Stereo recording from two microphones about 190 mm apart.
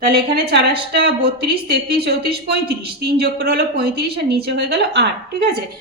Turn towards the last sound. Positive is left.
turn(degrees=-60)  # may be behind; listen again after turning